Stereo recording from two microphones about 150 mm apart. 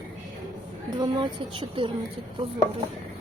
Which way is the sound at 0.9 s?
30° right (ahead or behind).